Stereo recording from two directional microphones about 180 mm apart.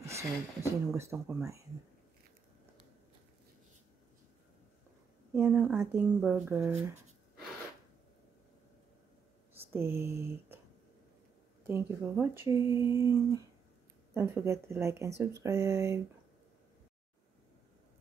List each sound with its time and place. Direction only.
0.0 s speech: 15° right (ahead or behind)
5.3 s speech: 10° right (ahead or behind)
9.6 s speech: 15° right (ahead or behind)
11.6 s speech: 15° right (ahead or behind)